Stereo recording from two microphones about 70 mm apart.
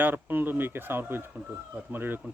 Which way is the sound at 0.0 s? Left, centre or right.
Right.